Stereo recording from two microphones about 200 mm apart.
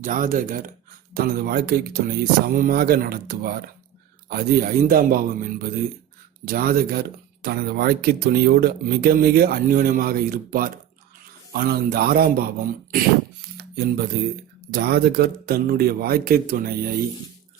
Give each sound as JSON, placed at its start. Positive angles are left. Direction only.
{"t": 0.0, "sound": "speech", "side_deg": -40}
{"t": 13.6, "sound": "music", "side_deg": -55}
{"t": 14.7, "sound": "speech", "side_deg": -55}